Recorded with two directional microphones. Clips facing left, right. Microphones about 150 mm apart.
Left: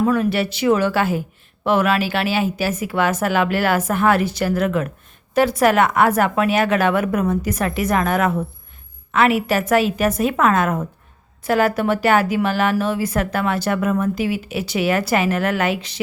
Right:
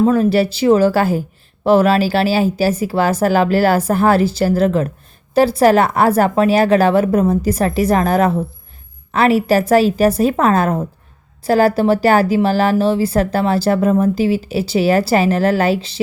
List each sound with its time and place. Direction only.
0.0 s a woman's voice: 30° right (ahead or behind)